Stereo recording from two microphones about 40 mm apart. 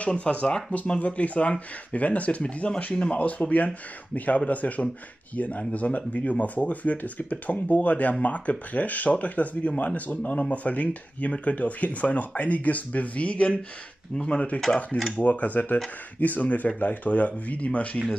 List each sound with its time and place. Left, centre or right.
0.0 s speech: left
2.4 s speech: left
3.1 s speech: left
15.1 s speech: left